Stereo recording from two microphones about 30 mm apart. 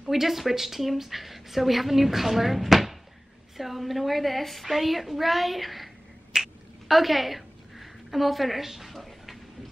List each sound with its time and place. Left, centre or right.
0.1 s a woman's voice: centre
6.3 s finger snapping: right
6.9 s a woman's voice: centre
8.9 s a sound: centre